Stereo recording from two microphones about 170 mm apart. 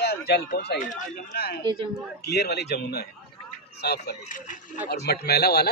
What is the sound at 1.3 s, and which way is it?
Speech, 65° left (ahead or behind).